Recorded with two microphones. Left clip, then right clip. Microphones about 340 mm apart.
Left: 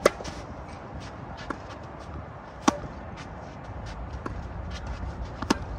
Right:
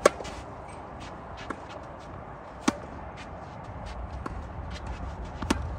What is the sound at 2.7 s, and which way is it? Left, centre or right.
Chop, centre.